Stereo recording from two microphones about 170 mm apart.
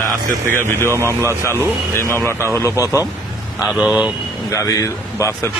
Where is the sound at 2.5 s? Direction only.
15° left (ahead or behind).